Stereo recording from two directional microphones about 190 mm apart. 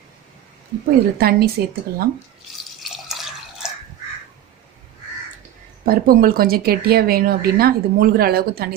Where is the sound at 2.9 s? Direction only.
Centre (ahead or behind).